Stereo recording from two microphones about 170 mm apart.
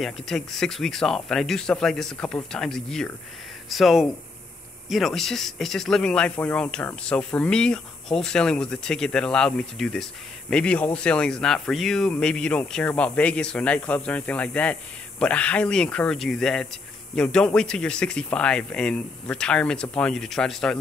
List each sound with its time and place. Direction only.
0.0 s speech: centre (ahead or behind)